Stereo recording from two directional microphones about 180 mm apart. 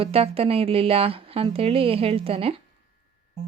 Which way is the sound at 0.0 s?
30° right (ahead or behind).